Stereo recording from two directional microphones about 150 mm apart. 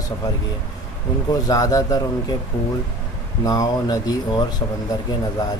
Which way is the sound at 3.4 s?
25° left (ahead or behind).